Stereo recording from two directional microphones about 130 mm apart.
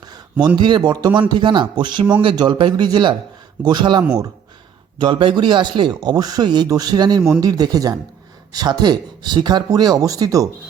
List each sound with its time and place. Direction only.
0.5 s speech: 35° right (ahead or behind)